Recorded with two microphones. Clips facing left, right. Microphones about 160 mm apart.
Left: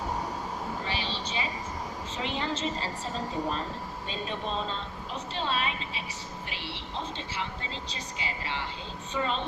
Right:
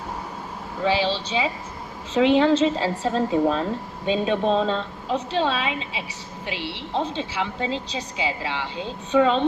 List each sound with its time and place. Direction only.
0.9 s a woman's voice: 90° right